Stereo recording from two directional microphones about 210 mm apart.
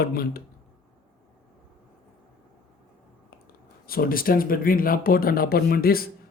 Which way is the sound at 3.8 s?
45° left (ahead or behind).